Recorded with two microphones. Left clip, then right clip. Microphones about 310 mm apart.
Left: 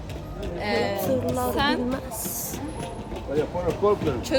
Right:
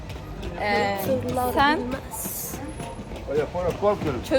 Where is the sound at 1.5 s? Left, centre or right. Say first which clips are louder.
Right 6 dB; centre.